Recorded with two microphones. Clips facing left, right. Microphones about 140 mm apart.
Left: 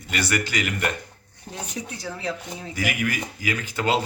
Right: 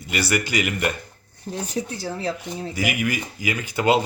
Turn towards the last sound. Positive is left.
turn(degrees=-10)  # may be behind; listen again after turning